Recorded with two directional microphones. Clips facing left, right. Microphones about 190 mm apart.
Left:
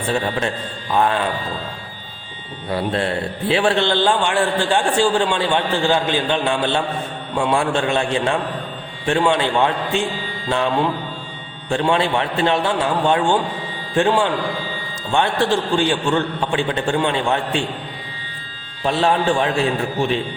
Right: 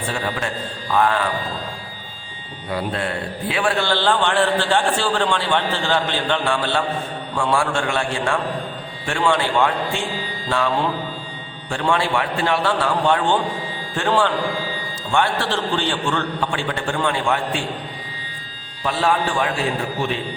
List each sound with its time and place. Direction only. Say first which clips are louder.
0.9 s a man's voice: left 1 dB; 20° left (ahead or behind)
3.5 s a man's voice: left 4 dB; 25° left (ahead or behind)
18.9 s a man's voice: left 3 dB; 25° left (ahead or behind)